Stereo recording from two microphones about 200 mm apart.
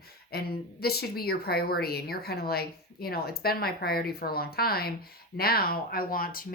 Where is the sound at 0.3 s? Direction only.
50° left (ahead or behind).